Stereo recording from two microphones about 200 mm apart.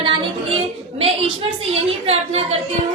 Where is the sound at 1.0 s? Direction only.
30° right (ahead or behind).